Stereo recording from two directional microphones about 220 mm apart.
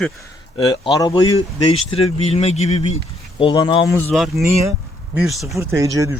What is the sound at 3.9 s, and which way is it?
A man's voice, 5° left (ahead or behind).